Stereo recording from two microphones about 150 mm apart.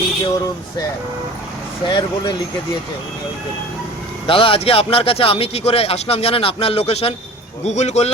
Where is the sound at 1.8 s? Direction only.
30° left (ahead or behind).